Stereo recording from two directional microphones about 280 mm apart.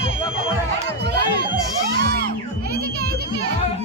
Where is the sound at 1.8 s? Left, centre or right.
Right.